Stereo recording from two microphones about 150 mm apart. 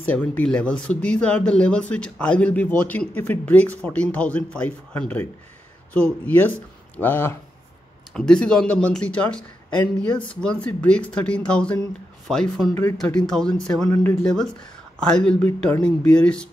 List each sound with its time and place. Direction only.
0.0 s speech: 10° left (ahead or behind)
13.8 s speech: 20° left (ahead or behind)
14.2 s speech: 5° left (ahead or behind)